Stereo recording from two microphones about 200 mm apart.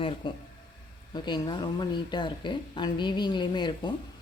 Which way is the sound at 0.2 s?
25° left (ahead or behind).